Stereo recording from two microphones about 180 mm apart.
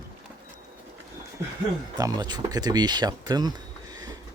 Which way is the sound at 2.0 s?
20° right (ahead or behind).